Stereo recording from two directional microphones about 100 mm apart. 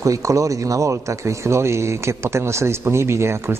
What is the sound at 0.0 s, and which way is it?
Speech, 30° right (ahead or behind).